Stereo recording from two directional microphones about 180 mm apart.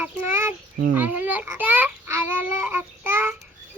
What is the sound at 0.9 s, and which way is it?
A child's voice, 10° right (ahead or behind).